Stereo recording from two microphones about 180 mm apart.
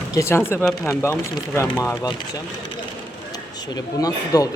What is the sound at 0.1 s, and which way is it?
Speech, 15° left (ahead or behind).